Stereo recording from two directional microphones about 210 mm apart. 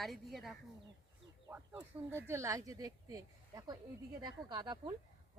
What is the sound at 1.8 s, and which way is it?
Speech, 10° right (ahead or behind).